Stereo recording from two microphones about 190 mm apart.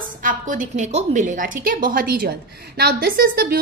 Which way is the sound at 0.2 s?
45° right (ahead or behind).